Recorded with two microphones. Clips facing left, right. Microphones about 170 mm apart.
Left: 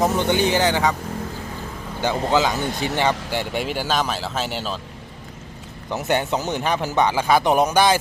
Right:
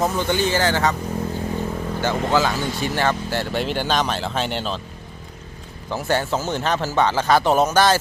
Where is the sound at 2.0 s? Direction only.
15° left (ahead or behind).